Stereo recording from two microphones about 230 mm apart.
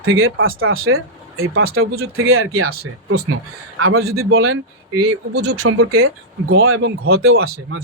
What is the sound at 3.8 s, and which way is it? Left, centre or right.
Speech, right.